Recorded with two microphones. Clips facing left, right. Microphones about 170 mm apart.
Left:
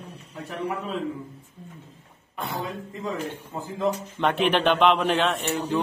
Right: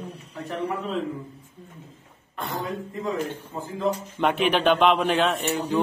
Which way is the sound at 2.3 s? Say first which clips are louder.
Even; 5° left (ahead or behind).